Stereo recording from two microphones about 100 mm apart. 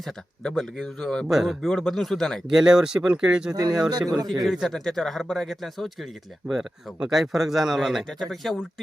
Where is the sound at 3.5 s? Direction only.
40° right (ahead or behind).